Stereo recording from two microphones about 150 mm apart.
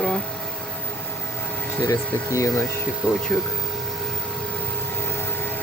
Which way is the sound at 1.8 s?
20° left (ahead or behind).